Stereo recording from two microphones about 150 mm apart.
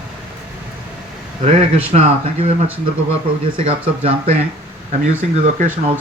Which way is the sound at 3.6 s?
45° right (ahead or behind).